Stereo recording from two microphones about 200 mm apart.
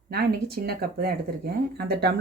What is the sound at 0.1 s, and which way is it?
Speech, 50° right (ahead or behind).